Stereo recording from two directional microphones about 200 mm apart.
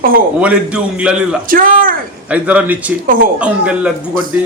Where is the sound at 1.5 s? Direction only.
45° right (ahead or behind).